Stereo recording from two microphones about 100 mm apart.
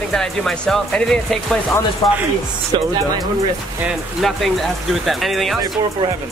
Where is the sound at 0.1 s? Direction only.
5° left (ahead or behind).